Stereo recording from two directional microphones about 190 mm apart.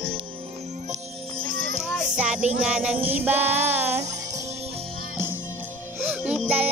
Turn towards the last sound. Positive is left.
turn(degrees=-5)  # may be behind; listen again after turning